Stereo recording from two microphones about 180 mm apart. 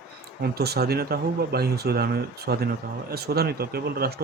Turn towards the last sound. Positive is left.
turn(degrees=-60)  # may be behind; listen again after turning